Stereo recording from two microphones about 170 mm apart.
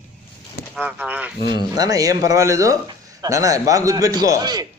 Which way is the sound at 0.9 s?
10° right (ahead or behind).